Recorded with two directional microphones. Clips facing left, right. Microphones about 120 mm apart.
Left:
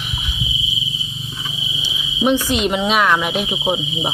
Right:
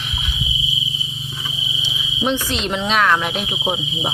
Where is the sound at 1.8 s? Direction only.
10° left (ahead or behind).